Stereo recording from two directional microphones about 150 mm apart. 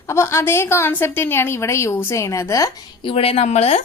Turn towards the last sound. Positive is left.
turn(degrees=45)  # may be behind; listen again after turning